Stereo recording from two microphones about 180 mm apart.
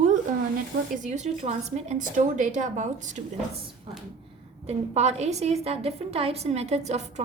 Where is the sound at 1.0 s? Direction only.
40° right (ahead or behind).